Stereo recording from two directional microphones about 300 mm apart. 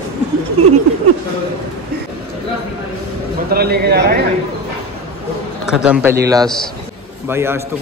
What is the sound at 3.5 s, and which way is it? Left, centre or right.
Speech, right.